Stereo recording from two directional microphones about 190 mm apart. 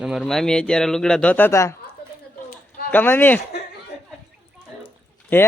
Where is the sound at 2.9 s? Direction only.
10° left (ahead or behind).